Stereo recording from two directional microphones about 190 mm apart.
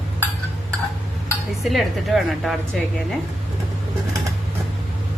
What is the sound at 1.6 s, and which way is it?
A woman's voice, centre (ahead or behind).